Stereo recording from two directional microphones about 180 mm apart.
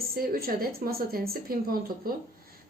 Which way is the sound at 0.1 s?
55° right (ahead or behind).